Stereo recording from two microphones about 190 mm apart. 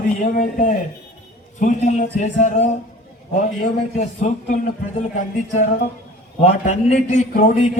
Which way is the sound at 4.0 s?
40° left (ahead or behind).